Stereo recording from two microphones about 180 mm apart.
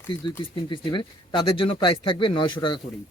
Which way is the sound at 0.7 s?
25° left (ahead or behind).